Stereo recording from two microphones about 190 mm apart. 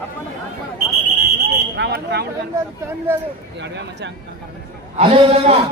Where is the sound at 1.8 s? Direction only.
60° right (ahead or behind).